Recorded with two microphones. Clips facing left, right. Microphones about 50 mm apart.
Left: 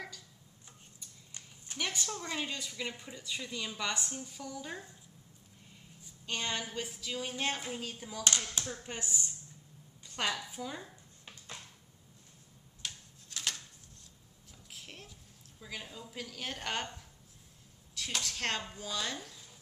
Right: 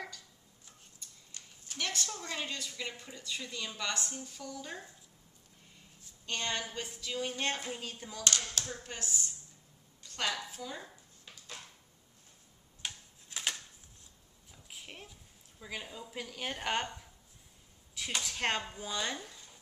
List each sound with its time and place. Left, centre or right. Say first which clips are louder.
1.8 s a woman's voice: left 1 dB; centre
6.2 s a woman's voice: even; centre
8.8 s a woman's voice: left 1 dB; centre
10.0 s a sound: left 1 dB; centre
10.5 s a woman's voice: left 2 dB; centre
12.8 s typewriter: right 1 dB; centre
14.7 s a sound: right 1 dB; centre
15.6 s a woman's voice: right 2 dB; centre